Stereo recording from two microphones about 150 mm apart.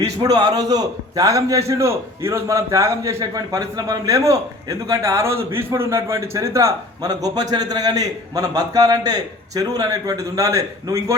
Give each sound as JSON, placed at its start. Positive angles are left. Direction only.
{"t": 0.2, "sound": "a man's voice", "side_deg": -25}